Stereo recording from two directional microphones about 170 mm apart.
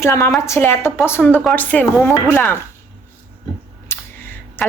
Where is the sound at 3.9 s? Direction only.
15° left (ahead or behind).